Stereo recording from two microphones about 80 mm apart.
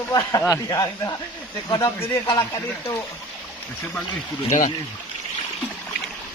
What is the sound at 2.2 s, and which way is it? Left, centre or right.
Speech, left.